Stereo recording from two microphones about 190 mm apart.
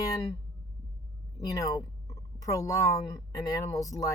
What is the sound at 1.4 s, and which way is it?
Speech, 20° left (ahead or behind).